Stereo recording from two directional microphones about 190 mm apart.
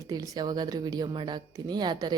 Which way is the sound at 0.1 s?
20° right (ahead or behind).